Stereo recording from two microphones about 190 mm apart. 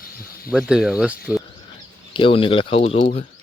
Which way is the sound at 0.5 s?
5° right (ahead or behind).